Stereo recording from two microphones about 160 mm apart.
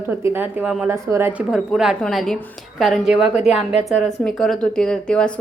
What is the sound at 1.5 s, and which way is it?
A woman's voice, 5° right (ahead or behind).